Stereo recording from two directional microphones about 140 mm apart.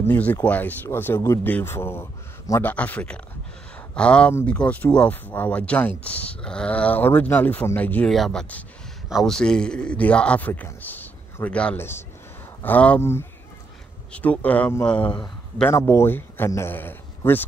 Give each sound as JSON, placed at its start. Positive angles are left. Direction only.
{"t": 0.0, "sound": "speech", "side_deg": 15}